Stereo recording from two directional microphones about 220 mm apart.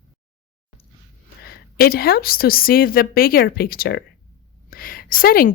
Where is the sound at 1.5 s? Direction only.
45° left (ahead or behind).